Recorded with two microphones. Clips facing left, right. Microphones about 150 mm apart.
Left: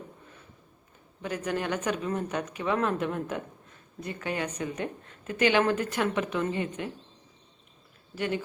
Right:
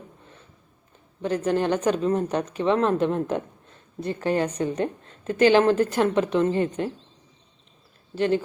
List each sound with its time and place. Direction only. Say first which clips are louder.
1.2 s speech: right 8 dB; 30° right (ahead or behind)
8.1 s speech: right 8 dB; 30° right (ahead or behind)